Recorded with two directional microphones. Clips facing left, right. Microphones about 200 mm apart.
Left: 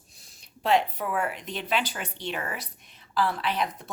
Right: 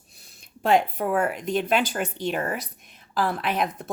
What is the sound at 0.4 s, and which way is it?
Speech, 50° right (ahead or behind).